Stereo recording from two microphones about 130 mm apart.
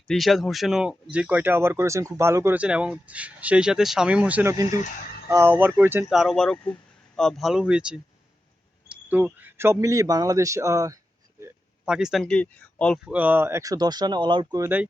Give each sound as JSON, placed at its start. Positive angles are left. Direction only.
{"t": 0.1, "sound": "speech", "side_deg": 0}
{"t": 2.6, "sound": "speech", "side_deg": -10}
{"t": 6.1, "sound": "speech", "side_deg": 0}
{"t": 11.9, "sound": "speech", "side_deg": -5}
{"t": 12.2, "sound": "speech", "side_deg": 10}
{"t": 13.1, "sound": "speech", "side_deg": -10}
{"t": 14.6, "sound": "speech", "side_deg": -15}